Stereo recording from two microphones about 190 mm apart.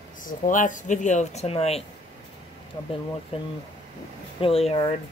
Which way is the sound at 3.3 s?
30° left (ahead or behind).